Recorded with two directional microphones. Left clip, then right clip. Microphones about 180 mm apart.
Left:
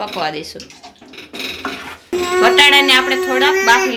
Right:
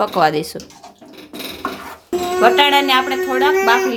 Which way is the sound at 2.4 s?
35° right (ahead or behind).